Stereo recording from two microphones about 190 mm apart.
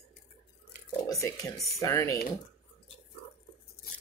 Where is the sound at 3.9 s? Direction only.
50° left (ahead or behind).